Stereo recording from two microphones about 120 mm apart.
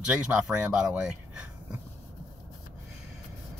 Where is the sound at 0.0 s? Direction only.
10° right (ahead or behind).